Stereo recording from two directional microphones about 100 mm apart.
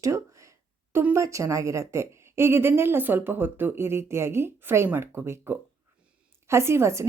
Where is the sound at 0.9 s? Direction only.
25° right (ahead or behind).